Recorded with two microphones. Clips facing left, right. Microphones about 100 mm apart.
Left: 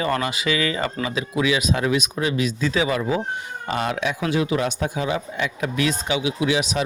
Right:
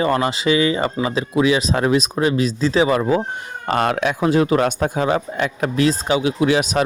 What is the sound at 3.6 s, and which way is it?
Speech, 55° right (ahead or behind).